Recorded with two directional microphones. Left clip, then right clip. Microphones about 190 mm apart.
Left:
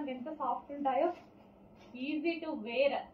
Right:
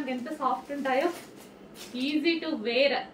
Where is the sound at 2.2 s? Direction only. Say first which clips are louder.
Right 8 dB; 20° right (ahead or behind).